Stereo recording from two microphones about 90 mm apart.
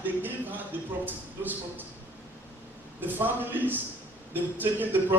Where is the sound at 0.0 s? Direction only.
20° right (ahead or behind).